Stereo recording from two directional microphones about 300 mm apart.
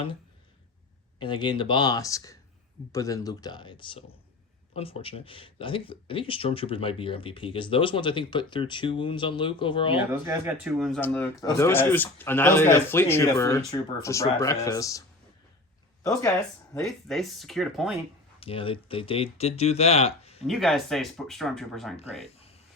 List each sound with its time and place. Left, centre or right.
1.2 s speech: centre
10.2 s speech: centre
16.7 s speech: centre
18.3 s speech: centre
20.5 s speech: centre